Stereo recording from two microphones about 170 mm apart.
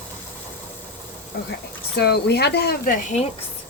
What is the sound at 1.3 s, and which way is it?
Speech, 65° left (ahead or behind).